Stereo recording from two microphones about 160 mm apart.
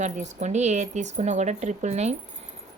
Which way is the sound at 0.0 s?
45° right (ahead or behind).